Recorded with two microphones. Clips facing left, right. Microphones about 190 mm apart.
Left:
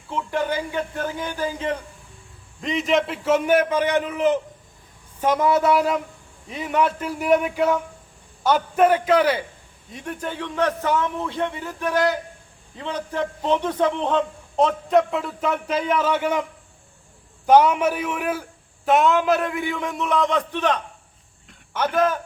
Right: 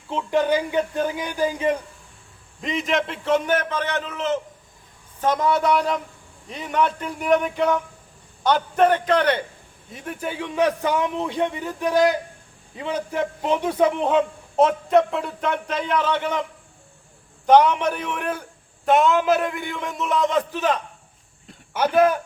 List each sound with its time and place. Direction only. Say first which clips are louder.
0.1 s a man's voice: right 4 dB; 20° right (ahead or behind)
2.6 s a man's voice: left 2 dB; centre (ahead or behind)
17.4 s a man's voice: even; 5° left (ahead or behind); by 22.2 s 10° right (ahead or behind)